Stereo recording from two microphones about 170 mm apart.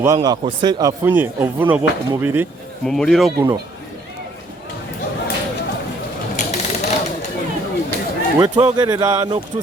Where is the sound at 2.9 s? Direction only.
Centre (ahead or behind).